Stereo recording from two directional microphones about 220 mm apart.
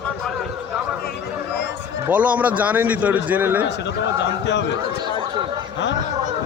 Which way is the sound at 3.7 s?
50° left (ahead or behind).